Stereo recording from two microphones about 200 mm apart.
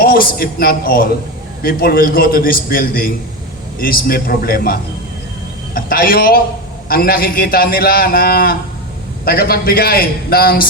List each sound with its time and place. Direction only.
0.0 s a man's voice: 50° left (ahead or behind)